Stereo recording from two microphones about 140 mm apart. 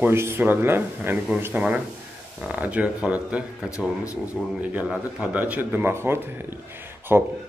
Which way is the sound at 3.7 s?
20° left (ahead or behind).